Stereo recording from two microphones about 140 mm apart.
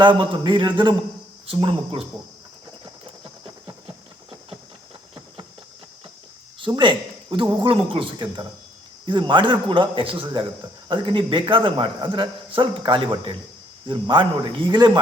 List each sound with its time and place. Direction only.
0.0 s a man's voice: 35° right (ahead or behind)
6.7 s a man's voice: 35° right (ahead or behind)